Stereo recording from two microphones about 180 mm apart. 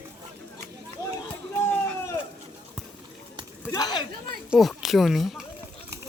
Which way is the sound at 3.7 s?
20° left (ahead or behind).